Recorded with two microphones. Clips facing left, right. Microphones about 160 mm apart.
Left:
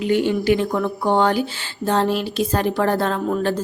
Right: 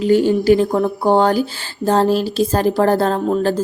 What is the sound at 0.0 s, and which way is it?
Speech, 35° right (ahead or behind).